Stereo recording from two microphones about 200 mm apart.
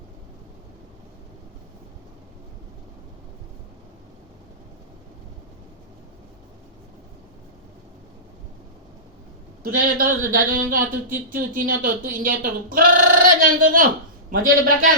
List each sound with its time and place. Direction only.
9.6 s a man's voice: 45° right (ahead or behind)